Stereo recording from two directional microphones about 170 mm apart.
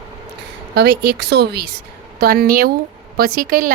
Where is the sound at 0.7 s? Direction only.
75° right (ahead or behind).